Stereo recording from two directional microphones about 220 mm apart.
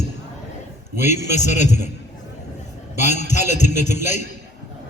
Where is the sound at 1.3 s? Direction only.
35° left (ahead or behind).